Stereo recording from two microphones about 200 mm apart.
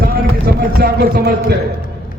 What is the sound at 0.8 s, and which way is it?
Speech, 50° right (ahead or behind).